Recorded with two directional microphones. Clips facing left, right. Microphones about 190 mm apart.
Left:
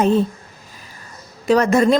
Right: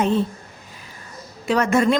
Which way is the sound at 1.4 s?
40° left (ahead or behind).